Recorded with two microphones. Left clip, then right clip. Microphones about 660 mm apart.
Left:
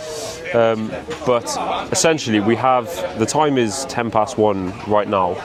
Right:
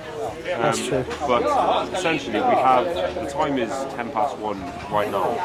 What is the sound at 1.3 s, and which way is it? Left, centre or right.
Speech, left.